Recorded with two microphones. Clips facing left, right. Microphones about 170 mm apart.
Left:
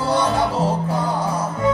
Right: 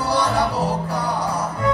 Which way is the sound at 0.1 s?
20° left (ahead or behind).